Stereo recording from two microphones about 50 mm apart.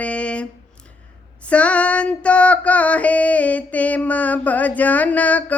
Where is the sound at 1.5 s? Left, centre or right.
Left.